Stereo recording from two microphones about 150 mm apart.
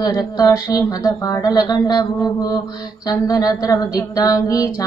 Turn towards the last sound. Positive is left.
turn(degrees=25)  # may be behind; listen again after turning